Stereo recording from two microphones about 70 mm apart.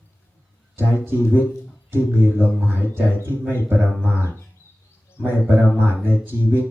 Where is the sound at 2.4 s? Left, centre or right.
Left.